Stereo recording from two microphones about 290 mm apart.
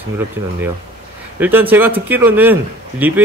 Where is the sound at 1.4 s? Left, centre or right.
Centre.